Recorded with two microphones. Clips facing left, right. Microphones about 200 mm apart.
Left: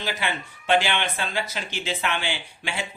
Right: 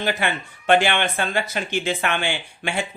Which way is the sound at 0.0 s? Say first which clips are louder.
Right 5 dB; 55° right (ahead or behind).